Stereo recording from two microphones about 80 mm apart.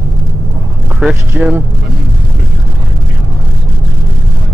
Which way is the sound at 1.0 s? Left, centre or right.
Centre.